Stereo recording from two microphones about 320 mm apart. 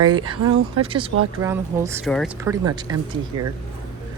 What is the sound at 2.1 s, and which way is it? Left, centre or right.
Speech, centre.